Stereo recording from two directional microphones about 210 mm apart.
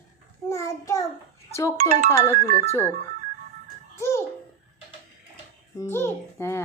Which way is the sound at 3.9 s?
10° left (ahead or behind).